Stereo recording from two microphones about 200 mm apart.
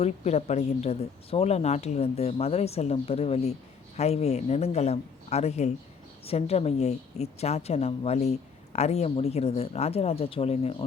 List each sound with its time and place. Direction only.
0.0 s a woman's voice: 35° left (ahead or behind)